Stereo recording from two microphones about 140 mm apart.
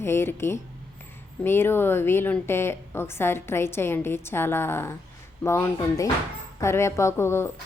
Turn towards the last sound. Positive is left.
turn(degrees=20)  # may be behind; listen again after turning